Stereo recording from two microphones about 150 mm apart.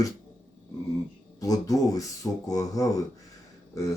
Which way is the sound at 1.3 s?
25° left (ahead or behind).